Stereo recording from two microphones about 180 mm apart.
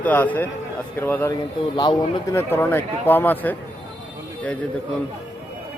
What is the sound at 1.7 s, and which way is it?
Speech, 25° left (ahead or behind).